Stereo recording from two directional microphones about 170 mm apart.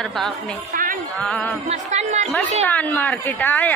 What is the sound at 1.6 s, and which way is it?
Music, 45° right (ahead or behind).